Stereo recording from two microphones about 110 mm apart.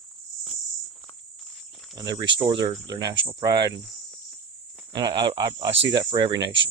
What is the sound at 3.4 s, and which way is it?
Speech, 35° right (ahead or behind).